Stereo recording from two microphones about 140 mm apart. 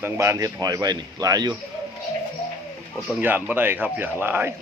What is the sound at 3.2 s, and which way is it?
Speech, 15° right (ahead or behind).